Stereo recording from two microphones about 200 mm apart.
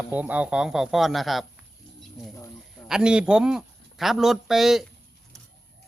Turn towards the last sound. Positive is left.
turn(degrees=0)  # may be behind; listen again after turning